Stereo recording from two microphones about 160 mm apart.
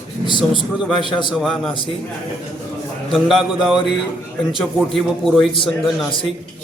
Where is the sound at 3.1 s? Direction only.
Centre (ahead or behind).